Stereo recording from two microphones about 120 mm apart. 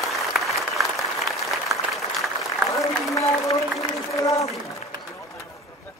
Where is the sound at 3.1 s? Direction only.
30° left (ahead or behind).